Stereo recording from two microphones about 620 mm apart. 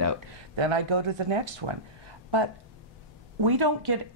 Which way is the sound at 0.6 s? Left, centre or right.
Right.